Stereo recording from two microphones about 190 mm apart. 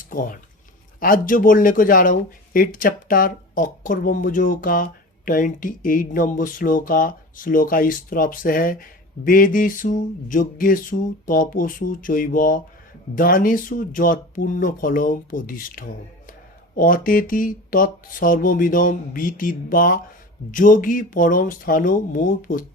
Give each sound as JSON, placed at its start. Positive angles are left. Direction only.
{"t": 0.0, "sound": "speech", "side_deg": 45}